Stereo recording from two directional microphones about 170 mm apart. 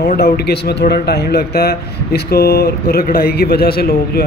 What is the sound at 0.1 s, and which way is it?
A man's voice, 70° left (ahead or behind).